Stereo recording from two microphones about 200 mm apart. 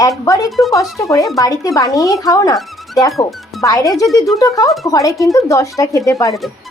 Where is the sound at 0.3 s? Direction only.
20° left (ahead or behind).